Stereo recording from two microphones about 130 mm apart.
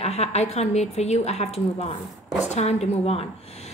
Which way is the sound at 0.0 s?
55° left (ahead or behind).